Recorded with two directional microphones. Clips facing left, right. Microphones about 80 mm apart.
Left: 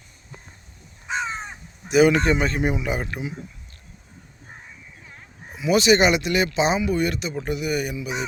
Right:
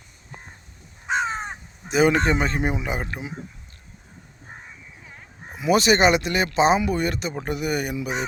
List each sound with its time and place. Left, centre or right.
1.0 s crow: right
1.9 s speech: right
5.5 s speech: right